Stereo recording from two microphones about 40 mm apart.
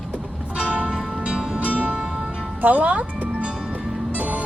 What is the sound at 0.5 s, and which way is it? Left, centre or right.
Music, right.